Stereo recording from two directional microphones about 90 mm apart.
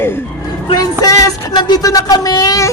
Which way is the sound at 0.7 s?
45° left (ahead or behind).